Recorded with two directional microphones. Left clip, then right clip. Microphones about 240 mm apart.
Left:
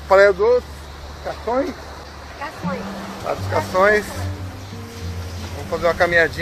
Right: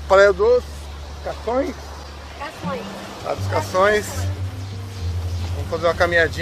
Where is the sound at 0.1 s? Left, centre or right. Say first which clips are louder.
Even; centre.